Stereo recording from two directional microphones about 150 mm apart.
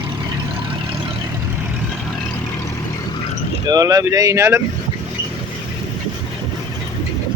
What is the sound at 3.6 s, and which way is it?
Speech, 25° right (ahead or behind).